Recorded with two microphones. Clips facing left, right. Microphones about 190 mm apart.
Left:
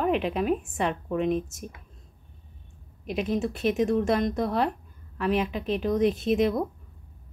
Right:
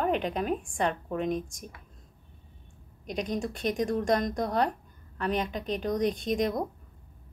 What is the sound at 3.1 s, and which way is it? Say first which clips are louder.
A woman's voice: left 4 dB; 5° left (ahead or behind).